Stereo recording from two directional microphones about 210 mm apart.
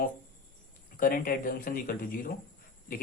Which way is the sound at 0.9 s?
40° left (ahead or behind).